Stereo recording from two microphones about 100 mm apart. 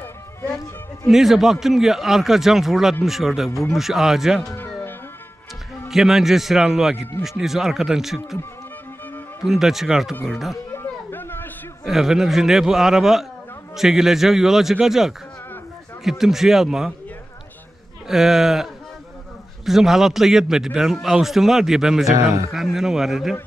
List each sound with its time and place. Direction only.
1.0 s a man's voice: 5° right (ahead or behind)
5.9 s a man's voice: 5° right (ahead or behind)
9.4 s a man's voice: 5° right (ahead or behind)
10.7 s a sound: 25° left (ahead or behind)
11.8 s a man's voice: 5° right (ahead or behind)
18.0 s a man's voice: 5° right (ahead or behind)